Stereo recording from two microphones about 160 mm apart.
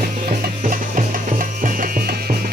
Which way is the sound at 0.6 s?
55° right (ahead or behind).